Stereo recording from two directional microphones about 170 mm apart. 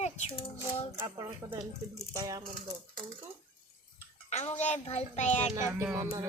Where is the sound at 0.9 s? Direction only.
20° right (ahead or behind).